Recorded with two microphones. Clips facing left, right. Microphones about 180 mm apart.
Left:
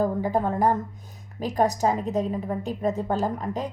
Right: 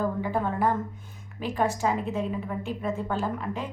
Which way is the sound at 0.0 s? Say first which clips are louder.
Left 4 dB; 40° left (ahead or behind).